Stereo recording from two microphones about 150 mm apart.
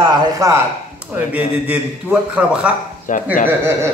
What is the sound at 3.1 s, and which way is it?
Bee, 60° left (ahead or behind).